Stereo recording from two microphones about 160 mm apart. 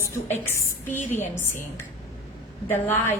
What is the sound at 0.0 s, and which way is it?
A woman's voice, 15° left (ahead or behind).